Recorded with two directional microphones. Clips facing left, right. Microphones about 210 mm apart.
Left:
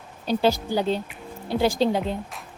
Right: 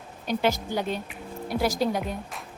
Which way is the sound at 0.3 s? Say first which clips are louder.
Left 4 dB; 30° left (ahead or behind).